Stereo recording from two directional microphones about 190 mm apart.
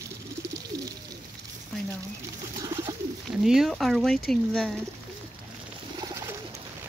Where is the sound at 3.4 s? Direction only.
Centre (ahead or behind).